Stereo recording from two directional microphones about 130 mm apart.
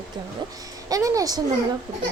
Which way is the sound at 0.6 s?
25° right (ahead or behind).